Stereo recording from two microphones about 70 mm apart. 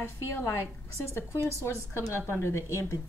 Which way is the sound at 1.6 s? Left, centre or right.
Left.